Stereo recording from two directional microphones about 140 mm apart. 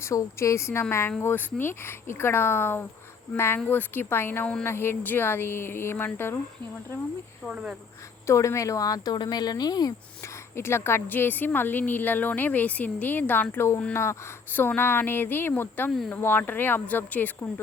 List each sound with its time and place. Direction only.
0.0 s speech: 20° left (ahead or behind)
7.4 s speech: 5° right (ahead or behind)
8.3 s speech: 20° left (ahead or behind)
10.5 s speech: 20° left (ahead or behind)
15.9 s speech: centre (ahead or behind)
16.1 s speech: 15° left (ahead or behind)